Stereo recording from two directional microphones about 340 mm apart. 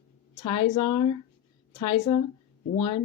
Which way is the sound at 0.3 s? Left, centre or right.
Centre.